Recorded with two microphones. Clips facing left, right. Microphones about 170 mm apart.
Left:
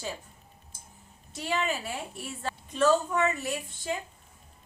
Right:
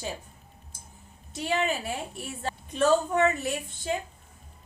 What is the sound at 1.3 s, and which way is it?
Speech, 20° right (ahead or behind).